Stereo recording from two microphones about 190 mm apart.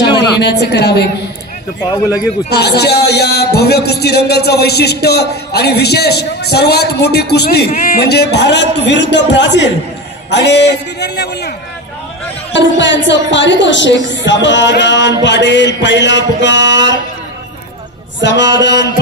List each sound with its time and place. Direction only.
0.4 s a man's voice: 60° left (ahead or behind)
2.5 s a man's voice: 60° left (ahead or behind)
12.5 s speech: 70° left (ahead or behind)
18.2 s speech: 65° left (ahead or behind)